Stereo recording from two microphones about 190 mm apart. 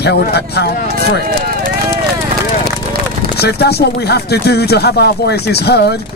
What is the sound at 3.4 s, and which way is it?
Speech, 60° left (ahead or behind).